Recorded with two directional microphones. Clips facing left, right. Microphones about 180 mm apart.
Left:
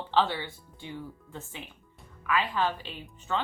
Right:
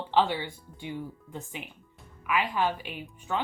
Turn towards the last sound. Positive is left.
turn(degrees=-15)  # may be behind; listen again after turning